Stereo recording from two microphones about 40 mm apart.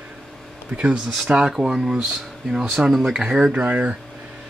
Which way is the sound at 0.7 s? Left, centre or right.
Right.